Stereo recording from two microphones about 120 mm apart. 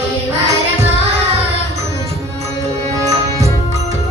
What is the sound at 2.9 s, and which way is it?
Music, 25° right (ahead or behind).